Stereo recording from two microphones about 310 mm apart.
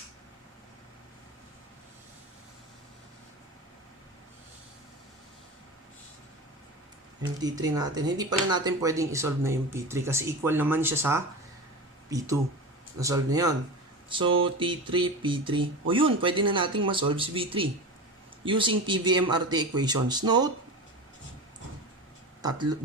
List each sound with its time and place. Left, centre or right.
7.2 s speech: centre
22.4 s speech: centre